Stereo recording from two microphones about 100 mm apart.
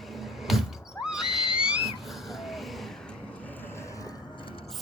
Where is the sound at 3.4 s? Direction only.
20° left (ahead or behind); by 4.2 s 35° left (ahead or behind).